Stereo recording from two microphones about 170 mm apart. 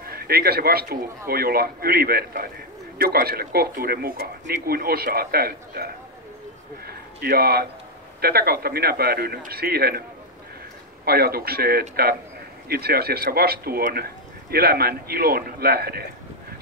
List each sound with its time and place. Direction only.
0.0 s a man's voice: 65° right (ahead or behind)
6.9 s a sound: 65° right (ahead or behind)
8.2 s speech: 65° right (ahead or behind)
11.1 s speech: 65° right (ahead or behind)